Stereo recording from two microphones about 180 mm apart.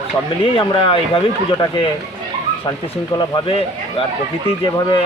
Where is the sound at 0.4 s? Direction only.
30° left (ahead or behind).